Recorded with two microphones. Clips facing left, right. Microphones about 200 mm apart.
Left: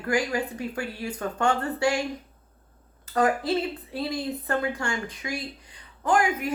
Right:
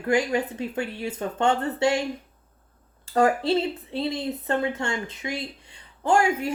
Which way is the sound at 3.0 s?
30° right (ahead or behind).